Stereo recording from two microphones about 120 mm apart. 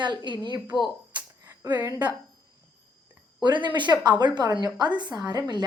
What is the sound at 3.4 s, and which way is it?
A woman's voice, 40° right (ahead or behind).